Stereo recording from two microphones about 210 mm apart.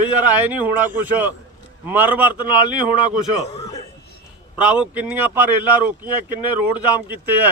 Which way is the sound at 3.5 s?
15° left (ahead or behind).